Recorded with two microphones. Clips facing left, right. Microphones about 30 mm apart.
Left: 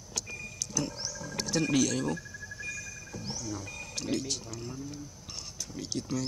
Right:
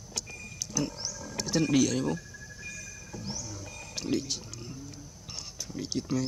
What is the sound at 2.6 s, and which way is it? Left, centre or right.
Music, centre.